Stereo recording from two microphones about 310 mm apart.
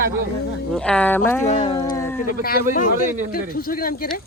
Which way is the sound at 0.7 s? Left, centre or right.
Centre.